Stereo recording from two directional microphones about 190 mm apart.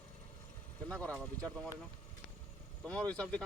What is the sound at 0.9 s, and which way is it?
Speech, 5° left (ahead or behind).